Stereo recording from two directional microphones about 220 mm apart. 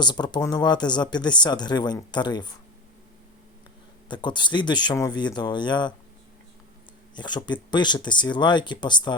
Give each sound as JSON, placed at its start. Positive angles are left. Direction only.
{"t": 0.0, "sound": "speech", "side_deg": 20}
{"t": 4.1, "sound": "speech", "side_deg": 20}
{"t": 7.2, "sound": "speech", "side_deg": 20}